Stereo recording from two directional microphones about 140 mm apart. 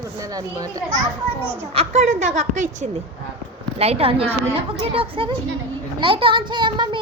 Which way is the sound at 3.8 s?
45° right (ahead or behind).